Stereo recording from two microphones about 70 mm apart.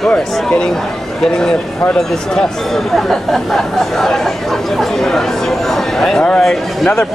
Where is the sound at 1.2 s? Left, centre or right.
Centre.